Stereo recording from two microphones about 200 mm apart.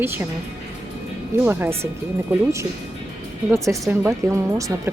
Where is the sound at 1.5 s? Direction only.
10° right (ahead or behind).